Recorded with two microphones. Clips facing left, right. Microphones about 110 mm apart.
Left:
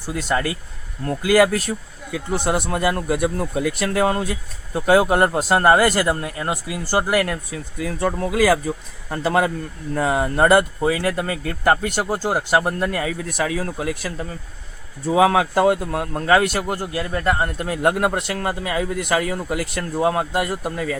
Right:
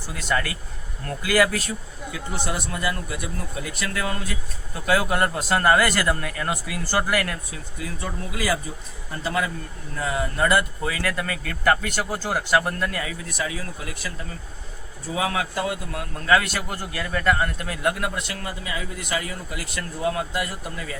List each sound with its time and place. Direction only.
1.2 s speech: 50° left (ahead or behind); by 3.8 s 65° left (ahead or behind)
3.8 s speech: 45° left (ahead or behind)
4.7 s a man's voice: 35° left (ahead or behind)
6.1 s speech: 25° left (ahead or behind)
7.1 s a man's voice: 35° left (ahead or behind)
7.5 s speech: 50° left (ahead or behind)
10.9 s a man's voice: 30° left (ahead or behind)
16.6 s a man's voice: 25° left (ahead or behind); by 19.5 s 45° left (ahead or behind)
19.5 s speech: 55° left (ahead or behind)